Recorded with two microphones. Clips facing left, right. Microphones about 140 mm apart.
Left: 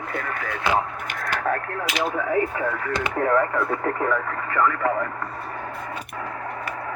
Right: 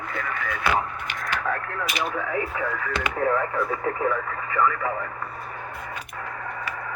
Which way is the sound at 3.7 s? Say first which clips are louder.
Left 2 dB; 60° left (ahead or behind).